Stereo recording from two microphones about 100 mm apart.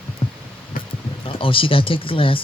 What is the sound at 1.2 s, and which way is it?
Speech, 60° left (ahead or behind).